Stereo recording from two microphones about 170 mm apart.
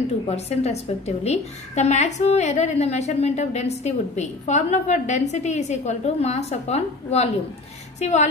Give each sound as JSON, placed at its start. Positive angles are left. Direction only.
{"t": 0.3, "sound": "a woman's voice", "side_deg": 40}